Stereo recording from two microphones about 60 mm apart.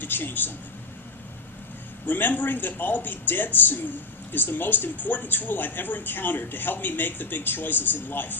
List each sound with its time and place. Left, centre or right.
0.0 s speech: left
2.0 s speech: left